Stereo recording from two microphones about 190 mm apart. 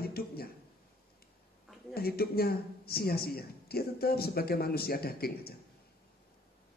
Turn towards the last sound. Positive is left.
turn(degrees=55)  # may be behind; listen again after turning